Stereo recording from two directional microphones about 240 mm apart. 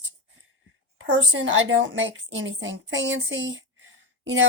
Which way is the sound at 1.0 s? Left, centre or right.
Right.